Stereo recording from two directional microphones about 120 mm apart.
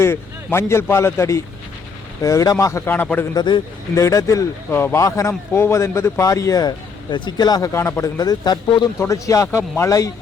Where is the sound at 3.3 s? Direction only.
40° left (ahead or behind).